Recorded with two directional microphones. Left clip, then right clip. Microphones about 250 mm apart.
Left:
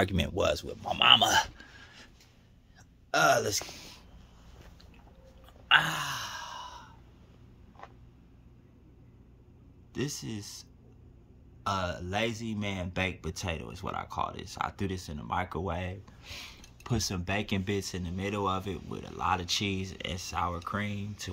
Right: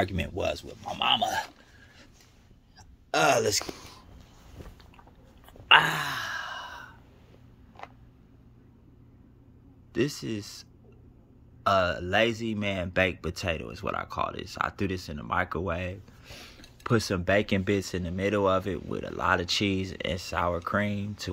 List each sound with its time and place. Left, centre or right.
0.0 s a man's voice: centre
3.1 s speech: centre
5.7 s sigh: centre
9.9 s speech: centre
16.3 s speech: centre
16.8 s speech: centre